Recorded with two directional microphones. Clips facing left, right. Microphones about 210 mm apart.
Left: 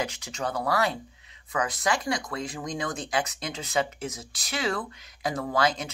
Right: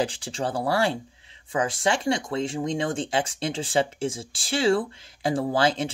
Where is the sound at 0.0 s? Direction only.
30° right (ahead or behind).